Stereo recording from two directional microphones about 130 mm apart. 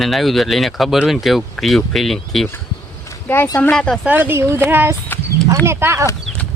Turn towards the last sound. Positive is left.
turn(degrees=-20)  # may be behind; listen again after turning